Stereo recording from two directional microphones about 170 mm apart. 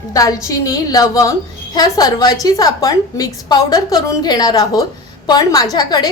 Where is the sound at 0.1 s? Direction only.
20° left (ahead or behind).